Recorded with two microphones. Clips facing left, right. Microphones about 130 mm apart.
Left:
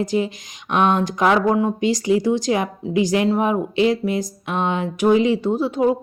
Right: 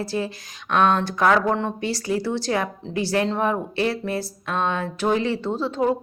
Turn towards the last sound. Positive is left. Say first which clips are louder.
# left 4 dB
turn(degrees=15)  # may be behind; listen again after turning